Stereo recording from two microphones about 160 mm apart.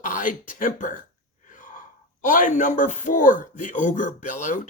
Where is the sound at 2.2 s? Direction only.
50° left (ahead or behind).